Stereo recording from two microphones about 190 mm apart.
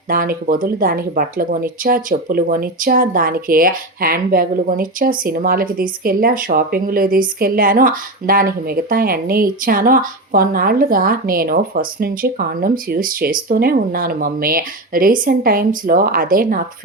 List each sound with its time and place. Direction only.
0.1 s speech: 50° right (ahead or behind)